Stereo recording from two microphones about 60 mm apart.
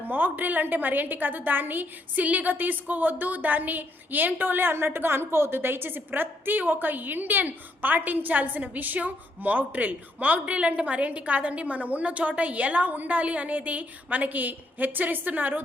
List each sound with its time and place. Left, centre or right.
0.0 s a woman's voice: right